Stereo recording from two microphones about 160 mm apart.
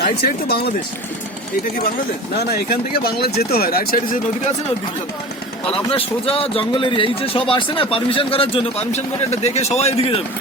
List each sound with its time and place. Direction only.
0.2 s speech: 90° left
2.5 s speech: 80° left
5.9 s speech: 35° left (ahead or behind)